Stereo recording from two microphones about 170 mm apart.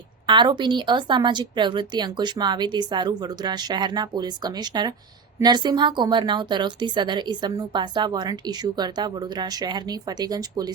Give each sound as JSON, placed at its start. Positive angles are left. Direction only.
{"t": 0.3, "sound": "speech", "side_deg": -25}